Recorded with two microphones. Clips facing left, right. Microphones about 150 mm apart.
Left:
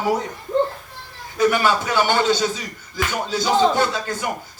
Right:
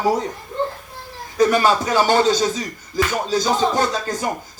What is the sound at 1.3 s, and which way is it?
Speech, 40° right (ahead or behind).